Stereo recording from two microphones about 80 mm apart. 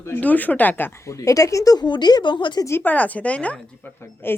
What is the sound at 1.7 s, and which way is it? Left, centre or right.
Speech, left.